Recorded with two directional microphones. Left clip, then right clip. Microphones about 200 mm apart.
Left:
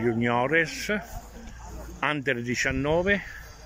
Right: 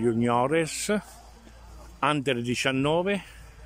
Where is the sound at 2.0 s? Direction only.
15° right (ahead or behind).